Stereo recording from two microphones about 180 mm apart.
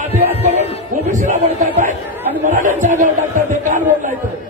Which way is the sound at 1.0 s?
40° right (ahead or behind).